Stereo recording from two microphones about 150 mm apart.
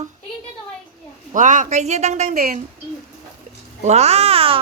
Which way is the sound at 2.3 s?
80° right.